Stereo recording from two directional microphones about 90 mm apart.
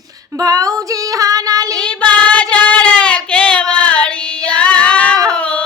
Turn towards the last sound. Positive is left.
turn(degrees=15)  # may be behind; listen again after turning